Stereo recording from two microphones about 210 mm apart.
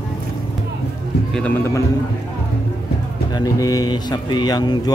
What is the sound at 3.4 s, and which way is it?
A man's voice, 15° left (ahead or behind).